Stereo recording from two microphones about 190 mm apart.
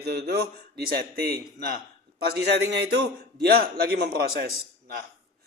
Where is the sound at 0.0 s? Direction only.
60° right (ahead or behind).